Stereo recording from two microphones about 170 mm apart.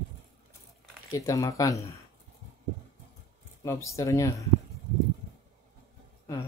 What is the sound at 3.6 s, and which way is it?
Speech, 20° left (ahead or behind).